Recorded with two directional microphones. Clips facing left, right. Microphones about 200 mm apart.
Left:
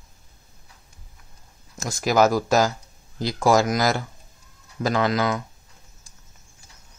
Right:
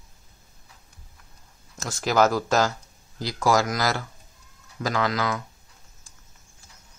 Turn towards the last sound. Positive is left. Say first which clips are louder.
# left 4 dB
turn(degrees=25)  # may be behind; listen again after turning